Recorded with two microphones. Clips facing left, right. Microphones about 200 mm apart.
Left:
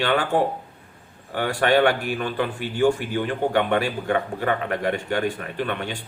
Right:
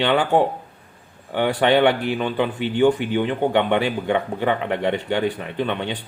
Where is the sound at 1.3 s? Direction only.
20° right (ahead or behind).